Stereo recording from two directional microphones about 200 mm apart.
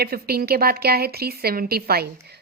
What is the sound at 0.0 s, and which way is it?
A woman's voice, 50° right (ahead or behind).